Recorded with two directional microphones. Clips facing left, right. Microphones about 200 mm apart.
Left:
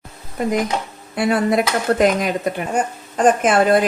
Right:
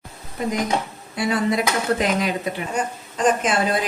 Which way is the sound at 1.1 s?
55° left (ahead or behind).